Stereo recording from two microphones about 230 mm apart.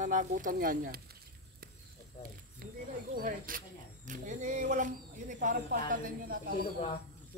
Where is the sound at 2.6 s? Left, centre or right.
Right.